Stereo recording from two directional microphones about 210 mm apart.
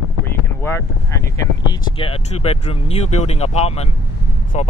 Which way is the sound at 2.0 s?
30° left (ahead or behind).